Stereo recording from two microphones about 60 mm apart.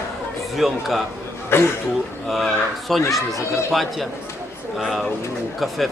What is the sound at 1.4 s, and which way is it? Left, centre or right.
Speech, left.